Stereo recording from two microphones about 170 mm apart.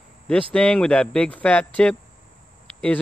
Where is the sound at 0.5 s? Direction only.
5° left (ahead or behind).